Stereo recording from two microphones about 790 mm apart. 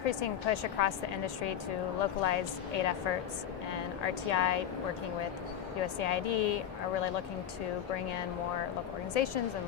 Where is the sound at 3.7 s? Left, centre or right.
Left.